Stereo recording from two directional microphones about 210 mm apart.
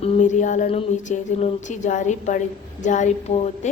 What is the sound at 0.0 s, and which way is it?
Speech, 35° left (ahead or behind).